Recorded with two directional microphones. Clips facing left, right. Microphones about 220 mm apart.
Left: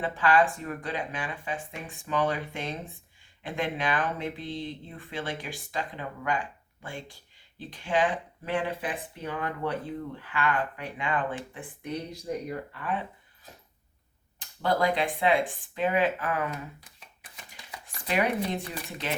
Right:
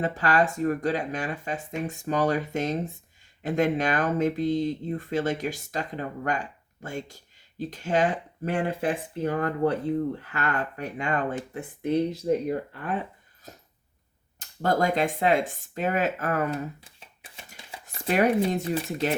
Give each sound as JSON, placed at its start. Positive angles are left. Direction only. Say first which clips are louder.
{"t": 0.0, "sound": "speech", "louder": "even", "side_deg": -40}
{"t": 14.3, "sound": "speech", "louder": "right 2 dB", "side_deg": -45}
{"t": 16.8, "sound": "shuffling cards", "louder": "right 2 dB", "side_deg": -30}
{"t": 18.1, "sound": "speech", "louder": "right 5 dB", "side_deg": -45}